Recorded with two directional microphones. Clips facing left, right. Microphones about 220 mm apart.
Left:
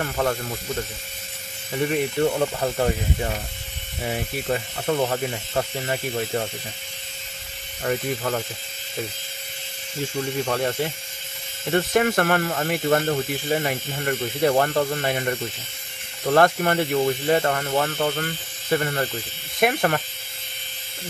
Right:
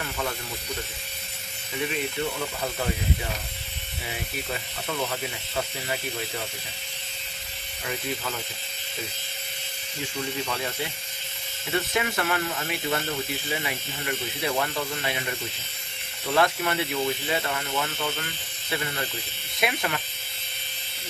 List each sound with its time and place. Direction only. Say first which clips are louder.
1.9 s speech: left 9 dB; 50° left (ahead or behind)
4.0 s speech: left 8 dB; 45° left (ahead or behind)
7.8 s speech: left 7 dB; 50° left (ahead or behind)
10.4 s speech: left 7 dB; 45° left (ahead or behind)
16.3 s speech: left 6 dB; 50° left (ahead or behind)